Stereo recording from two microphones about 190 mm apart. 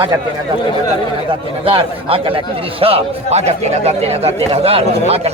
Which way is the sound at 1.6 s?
30° right (ahead or behind).